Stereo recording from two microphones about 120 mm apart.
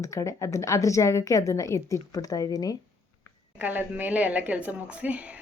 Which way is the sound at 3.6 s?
15° right (ahead or behind).